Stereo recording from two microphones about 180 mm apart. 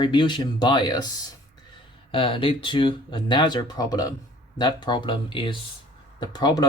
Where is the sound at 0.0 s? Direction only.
25° left (ahead or behind).